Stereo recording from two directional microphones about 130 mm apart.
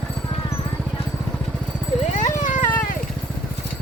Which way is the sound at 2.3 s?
90° left.